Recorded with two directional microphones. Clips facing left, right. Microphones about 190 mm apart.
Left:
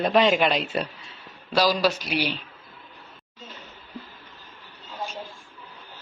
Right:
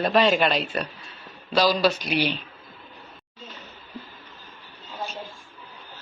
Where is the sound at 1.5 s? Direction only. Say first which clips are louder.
Right 1 dB; 10° left (ahead or behind).